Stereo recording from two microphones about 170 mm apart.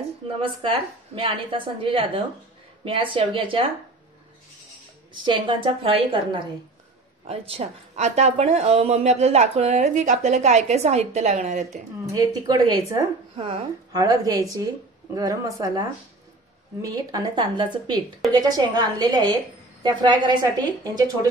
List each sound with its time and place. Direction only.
0.4 s speech: 30° right (ahead or behind)
5.2 s a woman's voice: 30° right (ahead or behind)
12.1 s a woman's voice: 20° right (ahead or behind)